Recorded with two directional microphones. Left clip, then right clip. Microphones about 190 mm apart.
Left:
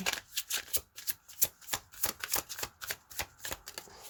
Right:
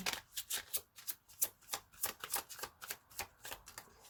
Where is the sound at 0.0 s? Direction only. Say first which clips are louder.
Left 6 dB; 15° left (ahead or behind).